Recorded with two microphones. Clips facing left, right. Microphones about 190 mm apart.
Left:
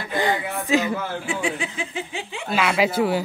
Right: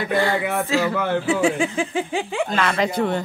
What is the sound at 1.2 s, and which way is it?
Speech, 40° right (ahead or behind).